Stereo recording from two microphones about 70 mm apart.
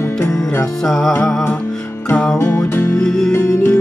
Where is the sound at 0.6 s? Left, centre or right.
Centre.